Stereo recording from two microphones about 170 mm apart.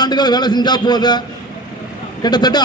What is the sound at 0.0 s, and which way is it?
A man's voice, 25° left (ahead or behind).